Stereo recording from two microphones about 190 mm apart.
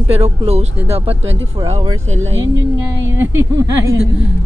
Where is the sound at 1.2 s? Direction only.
85° right.